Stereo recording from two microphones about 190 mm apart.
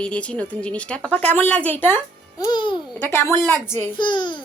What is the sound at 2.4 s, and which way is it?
Speech, 25° left (ahead or behind).